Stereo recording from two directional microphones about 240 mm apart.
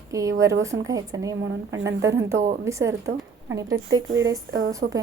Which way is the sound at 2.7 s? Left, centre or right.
Centre.